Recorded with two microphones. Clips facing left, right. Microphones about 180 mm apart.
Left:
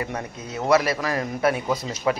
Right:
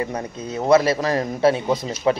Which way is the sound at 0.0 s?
25° right (ahead or behind).